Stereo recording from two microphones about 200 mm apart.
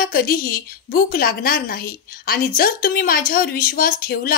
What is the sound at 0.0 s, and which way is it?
A woman's voice, 45° left (ahead or behind).